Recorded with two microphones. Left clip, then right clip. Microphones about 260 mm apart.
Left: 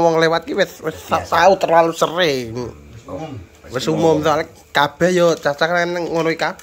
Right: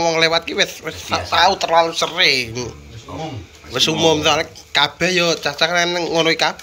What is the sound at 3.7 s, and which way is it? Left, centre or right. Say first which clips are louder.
A man's voice: right 1 dB; left.